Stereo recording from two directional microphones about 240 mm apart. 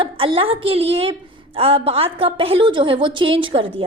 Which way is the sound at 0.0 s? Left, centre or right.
Right.